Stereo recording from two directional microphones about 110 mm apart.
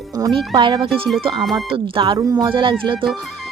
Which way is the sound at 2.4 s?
50° right (ahead or behind).